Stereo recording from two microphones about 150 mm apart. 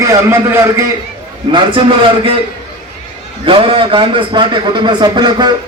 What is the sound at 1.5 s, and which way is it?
Speech, 35° right (ahead or behind).